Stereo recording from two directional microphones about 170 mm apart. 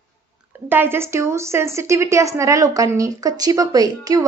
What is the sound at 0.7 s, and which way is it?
A woman's voice, 10° right (ahead or behind).